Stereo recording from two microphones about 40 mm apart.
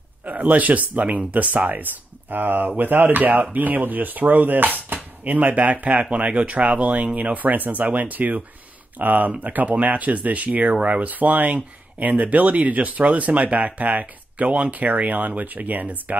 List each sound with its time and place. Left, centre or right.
0.2 s speech: right